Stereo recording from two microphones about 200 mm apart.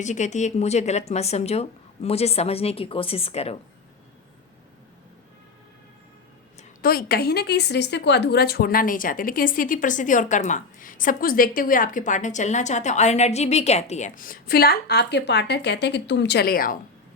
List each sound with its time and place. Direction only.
0.0 s speech: 35° left (ahead or behind)
6.6 s a woman's voice: 50° left (ahead or behind)